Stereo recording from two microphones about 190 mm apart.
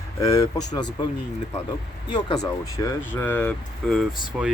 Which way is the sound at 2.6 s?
15° left (ahead or behind).